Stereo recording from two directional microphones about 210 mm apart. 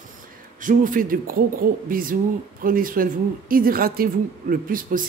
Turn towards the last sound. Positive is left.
turn(degrees=-40)  # may be behind; listen again after turning